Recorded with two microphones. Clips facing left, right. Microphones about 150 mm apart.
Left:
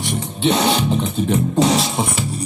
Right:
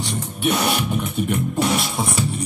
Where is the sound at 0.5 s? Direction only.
30° left (ahead or behind).